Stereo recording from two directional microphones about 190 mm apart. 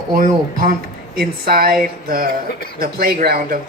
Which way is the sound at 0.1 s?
45° right (ahead or behind).